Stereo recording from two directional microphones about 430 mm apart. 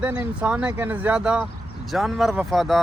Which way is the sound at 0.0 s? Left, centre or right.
Centre.